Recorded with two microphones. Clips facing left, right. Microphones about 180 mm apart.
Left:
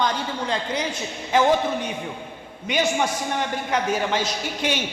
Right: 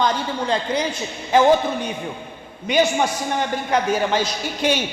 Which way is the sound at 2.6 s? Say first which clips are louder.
Right 4 dB; 35° right (ahead or behind).